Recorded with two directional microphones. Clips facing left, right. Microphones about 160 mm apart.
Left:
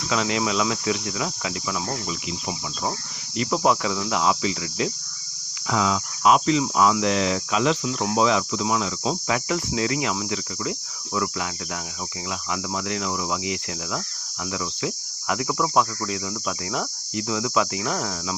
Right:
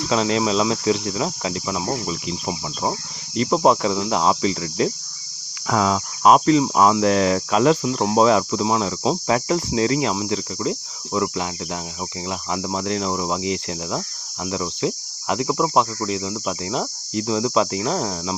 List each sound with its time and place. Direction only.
0.1 s cricket: 35° right (ahead or behind)
5.6 s cricket: 45° right (ahead or behind)
7.0 s speech: 45° right (ahead or behind)
7.9 s cricket: 35° right (ahead or behind)